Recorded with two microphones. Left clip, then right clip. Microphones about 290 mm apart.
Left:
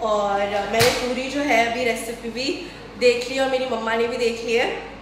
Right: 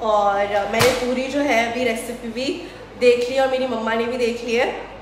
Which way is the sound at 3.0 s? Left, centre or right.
Centre.